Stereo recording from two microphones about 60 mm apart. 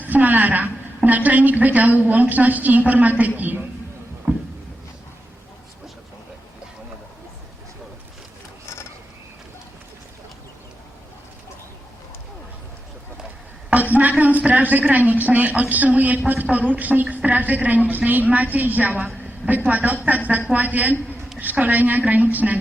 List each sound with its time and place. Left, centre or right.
0.0 s a woman's voice: right
4.3 s a sound: right
13.9 s a woman's voice: right